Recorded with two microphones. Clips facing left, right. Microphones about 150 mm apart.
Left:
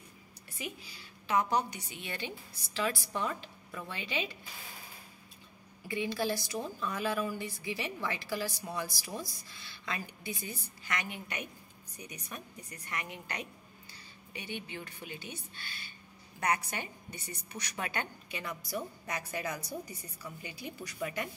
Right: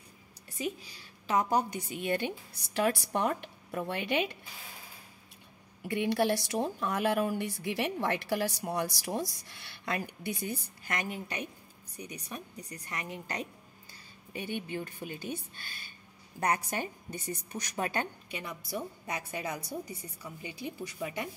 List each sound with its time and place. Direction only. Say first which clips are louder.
0.6 s a woman's voice: right 7 dB; 40° right (ahead or behind); by 4.4 s 60° right (ahead or behind)
5.9 s a woman's voice: right 5 dB; 65° right (ahead or behind); by 13.5 s 35° right (ahead or behind)
14.3 s a woman's voice: right 6 dB; 45° right (ahead or behind)
18.6 s a woman's voice: right 1 dB; 25° right (ahead or behind)